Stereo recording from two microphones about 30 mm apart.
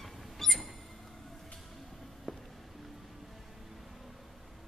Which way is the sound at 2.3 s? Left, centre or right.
Centre.